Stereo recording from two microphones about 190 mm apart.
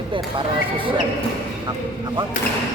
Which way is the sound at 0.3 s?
25° right (ahead or behind).